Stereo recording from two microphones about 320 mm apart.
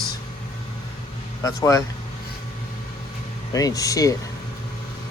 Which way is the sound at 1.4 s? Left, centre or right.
Centre.